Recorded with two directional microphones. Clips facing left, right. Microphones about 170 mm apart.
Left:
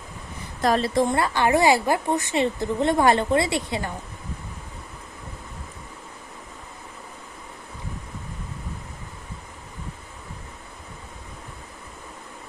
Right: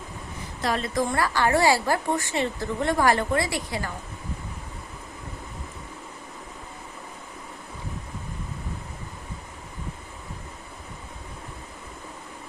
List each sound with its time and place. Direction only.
0.6 s a woman's voice: 40° left (ahead or behind)
0.9 s a woman's voice: 25° left (ahead or behind)